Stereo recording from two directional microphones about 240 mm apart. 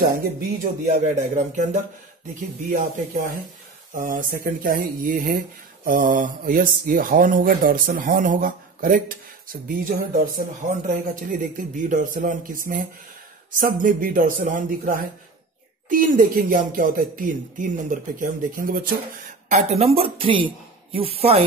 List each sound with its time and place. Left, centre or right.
0.4 s speech: right
3.9 s speech: right
19.5 s speech: right